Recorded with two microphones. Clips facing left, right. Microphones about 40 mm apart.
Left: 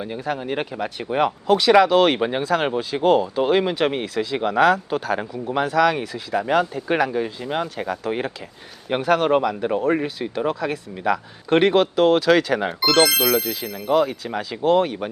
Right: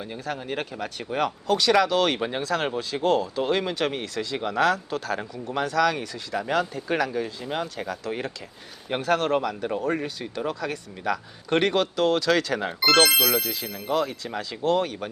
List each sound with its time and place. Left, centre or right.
0.0 s speech: centre
12.8 s speech: centre
13.1 s speech: centre